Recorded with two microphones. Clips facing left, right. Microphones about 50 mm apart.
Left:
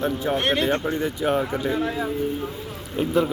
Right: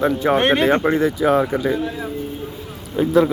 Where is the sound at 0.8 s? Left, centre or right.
Right.